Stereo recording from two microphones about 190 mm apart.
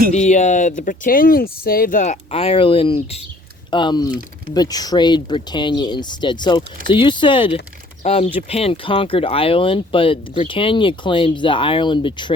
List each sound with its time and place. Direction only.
0.1 s speech: 40° left (ahead or behind)